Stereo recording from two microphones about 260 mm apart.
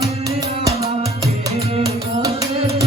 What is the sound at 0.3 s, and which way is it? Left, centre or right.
Music, centre.